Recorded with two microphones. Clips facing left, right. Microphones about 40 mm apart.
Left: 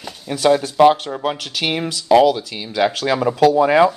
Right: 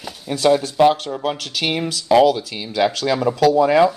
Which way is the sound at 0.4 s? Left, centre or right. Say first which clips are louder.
Left 2 dB; centre.